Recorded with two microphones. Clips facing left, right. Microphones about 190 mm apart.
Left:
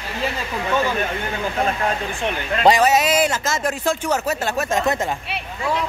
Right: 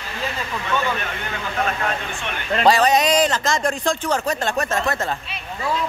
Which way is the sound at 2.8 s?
5° left (ahead or behind).